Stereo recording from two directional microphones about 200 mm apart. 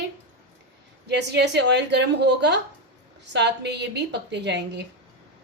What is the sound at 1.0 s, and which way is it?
Speech, 55° right (ahead or behind).